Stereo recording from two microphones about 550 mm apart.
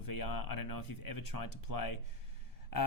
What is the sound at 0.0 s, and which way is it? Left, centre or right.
Speech, left.